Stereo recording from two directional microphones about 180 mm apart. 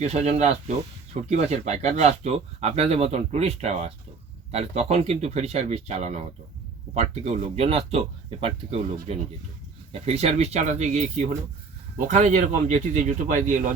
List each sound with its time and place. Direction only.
0.0 s speech: 35° right (ahead or behind)